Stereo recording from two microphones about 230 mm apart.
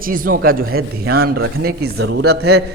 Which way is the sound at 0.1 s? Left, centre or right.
Right.